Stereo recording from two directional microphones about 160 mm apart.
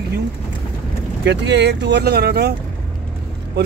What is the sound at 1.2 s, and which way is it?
Speech, 90° right.